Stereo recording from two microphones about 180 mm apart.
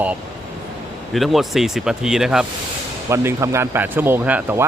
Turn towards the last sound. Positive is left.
turn(degrees=-10)  # may be behind; listen again after turning